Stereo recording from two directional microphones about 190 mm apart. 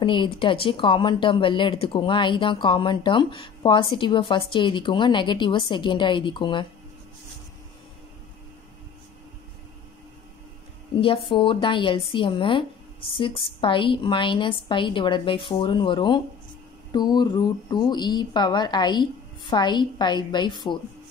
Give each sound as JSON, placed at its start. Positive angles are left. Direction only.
{"t": 0.0, "sound": "speech", "side_deg": 25}
{"t": 11.2, "sound": "speech", "side_deg": 25}